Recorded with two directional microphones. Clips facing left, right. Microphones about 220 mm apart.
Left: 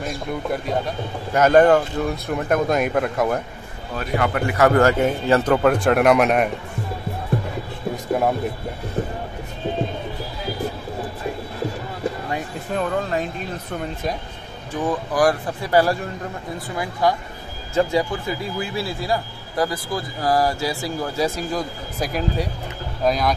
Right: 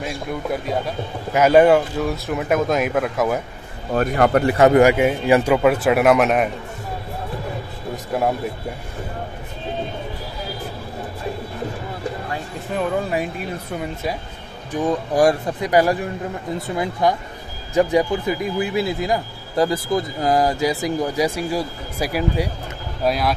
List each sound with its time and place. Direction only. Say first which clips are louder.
0.0 s speech: even; centre (ahead or behind)
3.9 s speech: right 6 dB; 50° right (ahead or behind)
4.6 s a man's voice: right 2 dB; 20° right (ahead or behind); by 6.5 s centre (ahead or behind)
12.7 s a man's voice: right 1 dB; 10° right (ahead or behind)
14.7 s a man's voice: right 3 dB; 20° right (ahead or behind); by 23.3 s 5° right (ahead or behind)